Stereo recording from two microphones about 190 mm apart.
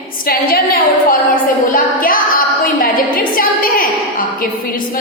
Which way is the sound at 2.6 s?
50° left (ahead or behind).